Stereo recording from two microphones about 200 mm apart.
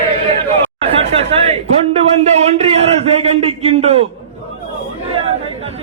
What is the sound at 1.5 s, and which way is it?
A man's voice, 30° right (ahead or behind).